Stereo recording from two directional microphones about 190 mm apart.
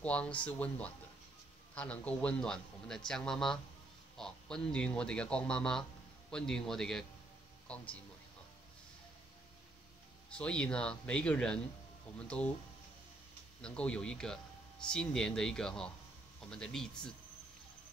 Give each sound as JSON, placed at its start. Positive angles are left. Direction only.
{"t": 0.0, "sound": "a man's voice", "side_deg": 5}
{"t": 10.3, "sound": "a man's voice", "side_deg": 5}
{"t": 13.6, "sound": "a man's voice", "side_deg": 5}